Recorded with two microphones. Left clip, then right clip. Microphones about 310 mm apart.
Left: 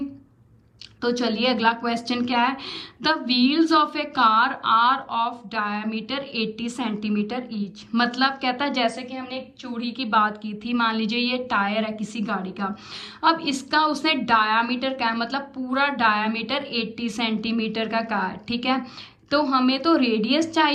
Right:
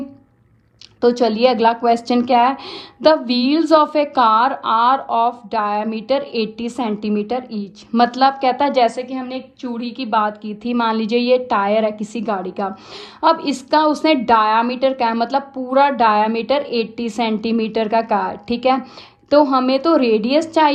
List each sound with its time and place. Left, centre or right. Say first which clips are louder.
1.0 s a woman's voice: right 9 dB; centre